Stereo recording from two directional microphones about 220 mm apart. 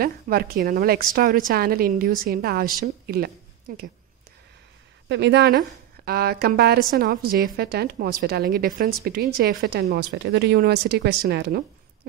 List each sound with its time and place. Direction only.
0.0 s a woman's voice: 40° right (ahead or behind)
5.0 s a woman's voice: 50° right (ahead or behind)